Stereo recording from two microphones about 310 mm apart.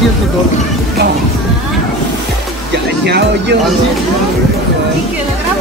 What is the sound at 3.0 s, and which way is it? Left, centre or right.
Speech, right.